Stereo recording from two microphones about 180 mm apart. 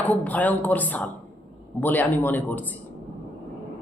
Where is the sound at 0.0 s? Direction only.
10° left (ahead or behind).